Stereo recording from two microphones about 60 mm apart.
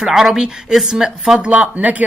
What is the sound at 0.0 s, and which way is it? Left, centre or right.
Speech, centre.